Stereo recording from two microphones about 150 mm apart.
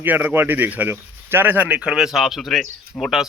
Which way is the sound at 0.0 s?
10° right (ahead or behind).